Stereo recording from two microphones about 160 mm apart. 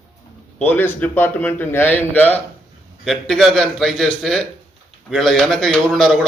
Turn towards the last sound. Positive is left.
turn(degrees=0)  # may be behind; listen again after turning